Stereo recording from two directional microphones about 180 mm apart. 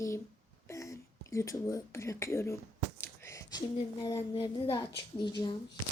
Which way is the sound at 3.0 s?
15° left (ahead or behind).